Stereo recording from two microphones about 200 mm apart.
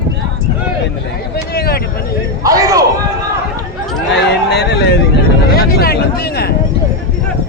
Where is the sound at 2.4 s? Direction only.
15° right (ahead or behind).